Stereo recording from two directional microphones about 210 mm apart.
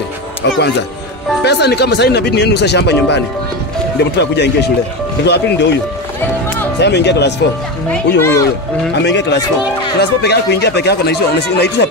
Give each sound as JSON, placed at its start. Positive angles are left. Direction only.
{"t": 1.4, "sound": "speech", "side_deg": 50}
{"t": 4.2, "sound": "speech", "side_deg": 55}
{"t": 6.8, "sound": "speech", "side_deg": 55}
{"t": 7.9, "sound": "speech", "side_deg": 10}
{"t": 8.9, "sound": "speech", "side_deg": 55}